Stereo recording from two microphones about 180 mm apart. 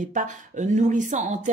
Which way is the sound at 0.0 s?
45° right (ahead or behind).